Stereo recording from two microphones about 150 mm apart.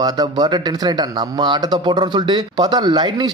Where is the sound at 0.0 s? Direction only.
25° right (ahead or behind).